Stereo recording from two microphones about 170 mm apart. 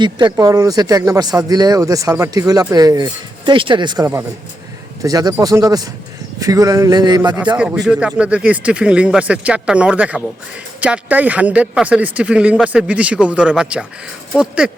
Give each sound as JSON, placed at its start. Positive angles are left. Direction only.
{"t": 0.0, "sound": "speech", "side_deg": -25}
{"t": 7.6, "sound": "speech", "side_deg": -5}